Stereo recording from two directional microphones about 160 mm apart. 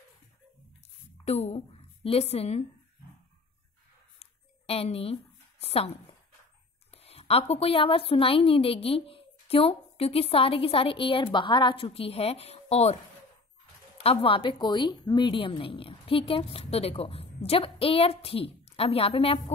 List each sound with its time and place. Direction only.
1.2 s a woman's voice: 40° left (ahead or behind)
4.2 s a sound: 40° left (ahead or behind)
5.6 s speech: 40° left (ahead or behind)
7.0 s a woman's voice: 40° left (ahead or behind)
14.2 s a woman's voice: 35° left (ahead or behind)